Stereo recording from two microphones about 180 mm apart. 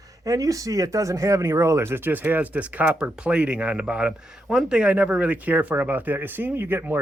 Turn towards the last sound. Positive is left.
turn(degrees=-10)  # may be behind; listen again after turning